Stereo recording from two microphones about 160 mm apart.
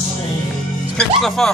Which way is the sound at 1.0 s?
5° left (ahead or behind).